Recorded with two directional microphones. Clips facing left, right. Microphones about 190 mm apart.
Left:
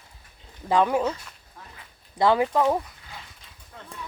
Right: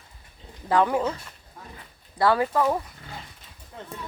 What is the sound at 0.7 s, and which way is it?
Speech, 15° left (ahead or behind).